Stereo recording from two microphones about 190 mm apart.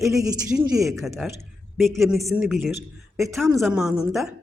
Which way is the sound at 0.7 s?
Centre (ahead or behind).